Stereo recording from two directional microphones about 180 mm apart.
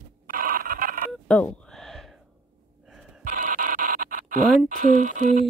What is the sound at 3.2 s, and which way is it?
Scratch, 45° right (ahead or behind).